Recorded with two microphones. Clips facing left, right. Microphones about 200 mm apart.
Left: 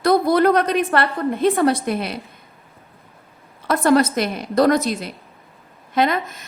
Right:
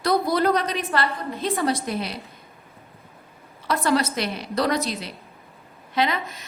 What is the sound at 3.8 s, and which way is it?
A woman's voice, 50° left (ahead or behind).